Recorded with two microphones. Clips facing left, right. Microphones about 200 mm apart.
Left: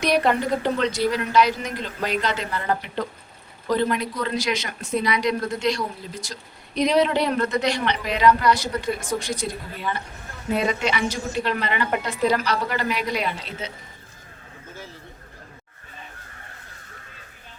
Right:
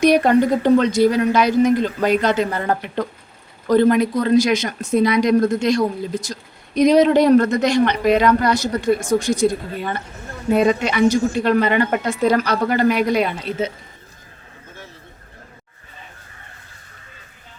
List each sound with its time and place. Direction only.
0.0 s a man's voice: 50° right (ahead or behind)